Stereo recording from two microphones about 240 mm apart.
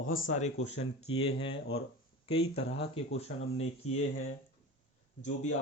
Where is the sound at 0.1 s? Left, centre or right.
Left.